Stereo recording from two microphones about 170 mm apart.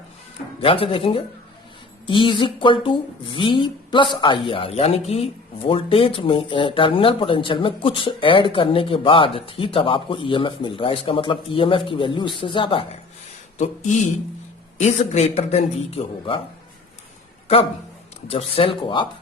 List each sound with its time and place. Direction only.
0.6 s speech: 35° left (ahead or behind)
13.6 s speech: 45° left (ahead or behind)
18.3 s speech: 35° left (ahead or behind)